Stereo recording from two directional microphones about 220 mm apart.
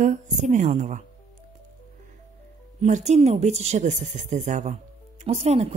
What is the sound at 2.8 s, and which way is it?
Speech, 30° right (ahead or behind).